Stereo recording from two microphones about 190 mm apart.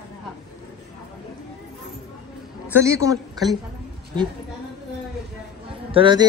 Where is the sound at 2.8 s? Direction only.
15° right (ahead or behind).